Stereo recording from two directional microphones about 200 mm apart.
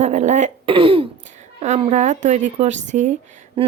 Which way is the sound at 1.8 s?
35° right (ahead or behind).